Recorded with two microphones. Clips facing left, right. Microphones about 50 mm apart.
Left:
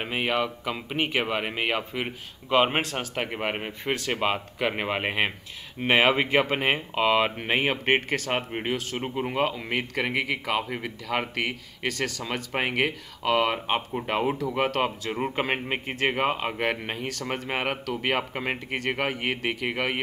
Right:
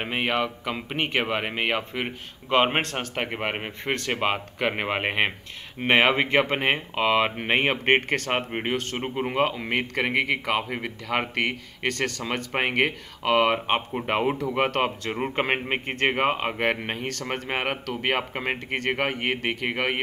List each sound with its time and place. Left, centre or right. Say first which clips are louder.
0.0 s speech: right 1 dB; centre
2.8 s speech: right 1 dB; centre
3.2 s speech: right 1 dB; centre